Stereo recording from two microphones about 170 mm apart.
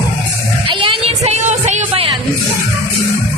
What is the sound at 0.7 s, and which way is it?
Music, 30° right (ahead or behind).